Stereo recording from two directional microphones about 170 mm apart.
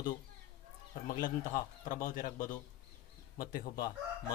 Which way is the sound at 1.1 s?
55° left (ahead or behind).